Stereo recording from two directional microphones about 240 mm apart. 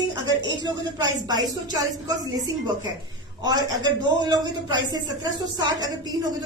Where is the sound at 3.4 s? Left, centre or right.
Centre.